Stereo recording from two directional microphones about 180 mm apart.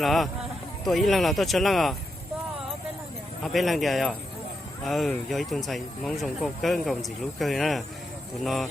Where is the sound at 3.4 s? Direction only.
Centre (ahead or behind).